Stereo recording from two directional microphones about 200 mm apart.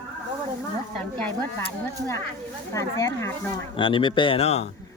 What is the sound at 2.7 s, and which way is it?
Speech, 15° left (ahead or behind).